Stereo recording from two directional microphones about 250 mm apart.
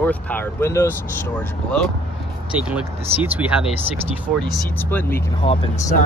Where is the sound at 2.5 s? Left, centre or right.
Centre.